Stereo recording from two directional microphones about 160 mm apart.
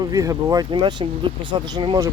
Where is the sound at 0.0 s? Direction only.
20° right (ahead or behind).